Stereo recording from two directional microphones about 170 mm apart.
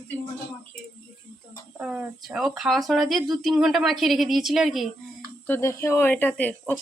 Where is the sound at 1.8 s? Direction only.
5° right (ahead or behind).